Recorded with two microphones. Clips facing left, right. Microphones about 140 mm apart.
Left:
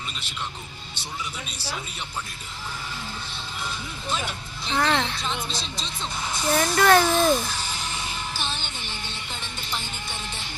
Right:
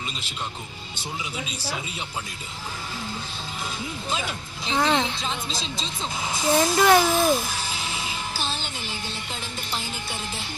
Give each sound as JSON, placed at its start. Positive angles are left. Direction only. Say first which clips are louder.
{"t": 1.2, "sound": "a woman's voice", "louder": "right 2 dB", "side_deg": -10}
{"t": 4.8, "sound": "a woman's voice", "louder": "right 1 dB", "side_deg": -15}
{"t": 6.4, "sound": "a woman's voice", "louder": "right 2 dB", "side_deg": -20}
{"t": 6.7, "sound": "music", "louder": "left 2 dB", "side_deg": -15}
{"t": 8.3, "sound": "music", "louder": "right 2 dB", "side_deg": -35}